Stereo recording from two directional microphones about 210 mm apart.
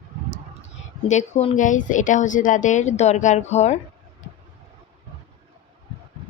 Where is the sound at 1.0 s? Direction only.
35° left (ahead or behind).